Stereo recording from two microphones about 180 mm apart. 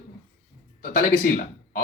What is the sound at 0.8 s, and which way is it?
Speech, 45° left (ahead or behind).